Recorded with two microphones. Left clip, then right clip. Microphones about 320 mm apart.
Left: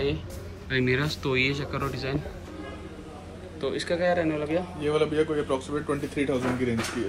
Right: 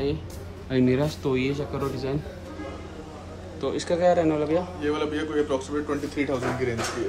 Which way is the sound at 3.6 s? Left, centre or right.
Centre.